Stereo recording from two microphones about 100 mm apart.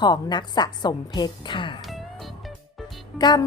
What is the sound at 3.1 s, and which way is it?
Speech, 45° left (ahead or behind).